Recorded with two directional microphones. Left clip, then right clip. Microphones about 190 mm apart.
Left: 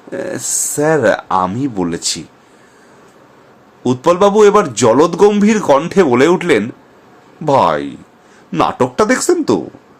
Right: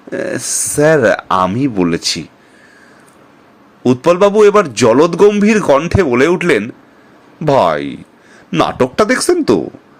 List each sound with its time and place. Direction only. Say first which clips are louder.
0.1 s a man's voice: right 2 dB; 15° right (ahead or behind)
3.8 s a man's voice: right 1 dB; 10° right (ahead or behind)